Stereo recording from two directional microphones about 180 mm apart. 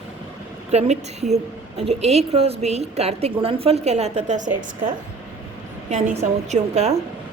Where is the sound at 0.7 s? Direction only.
35° right (ahead or behind).